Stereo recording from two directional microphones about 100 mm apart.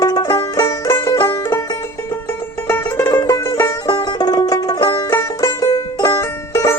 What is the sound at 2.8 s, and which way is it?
Music, 25° left (ahead or behind).